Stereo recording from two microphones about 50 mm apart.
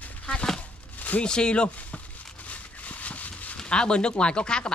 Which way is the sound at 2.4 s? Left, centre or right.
Left.